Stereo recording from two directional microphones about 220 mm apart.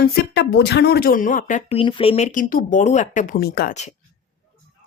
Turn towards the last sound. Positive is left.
turn(degrees=45)  # may be behind; listen again after turning